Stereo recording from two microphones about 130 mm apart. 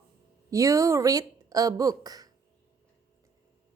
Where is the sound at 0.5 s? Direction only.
25° right (ahead or behind).